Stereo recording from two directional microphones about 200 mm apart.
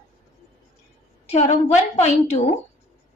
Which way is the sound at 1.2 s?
35° left (ahead or behind).